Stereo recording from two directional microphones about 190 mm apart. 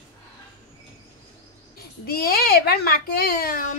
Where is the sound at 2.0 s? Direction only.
50° left (ahead or behind).